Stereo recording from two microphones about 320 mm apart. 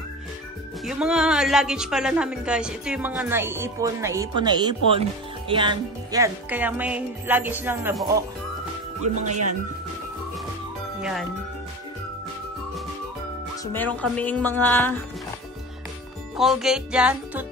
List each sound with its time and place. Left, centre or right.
0.8 s a woman's voice: centre
9.0 s speech: right
11.0 s speech: centre
13.7 s a woman's voice: centre
16.3 s a woman's voice: centre